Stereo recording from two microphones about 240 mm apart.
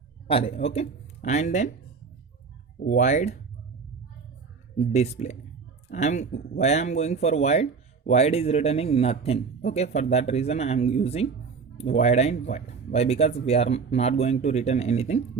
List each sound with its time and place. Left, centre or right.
0.3 s speech: left
2.8 s speech: left
4.8 s speech: left